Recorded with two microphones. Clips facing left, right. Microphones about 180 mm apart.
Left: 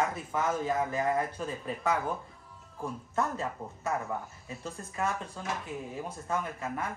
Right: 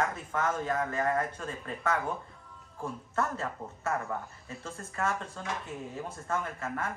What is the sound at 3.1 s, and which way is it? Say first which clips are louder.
Speech: left 1 dB; 15° left (ahead or behind).